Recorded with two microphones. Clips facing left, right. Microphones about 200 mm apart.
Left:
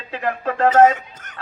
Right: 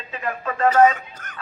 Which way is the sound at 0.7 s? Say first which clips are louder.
Left 2 dB; 20° left (ahead or behind).